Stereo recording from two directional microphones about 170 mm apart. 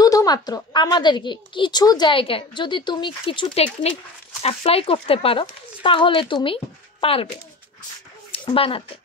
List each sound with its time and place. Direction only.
0.0 s a woman's voice: 20° left (ahead or behind)
8.3 s speech: 35° left (ahead or behind)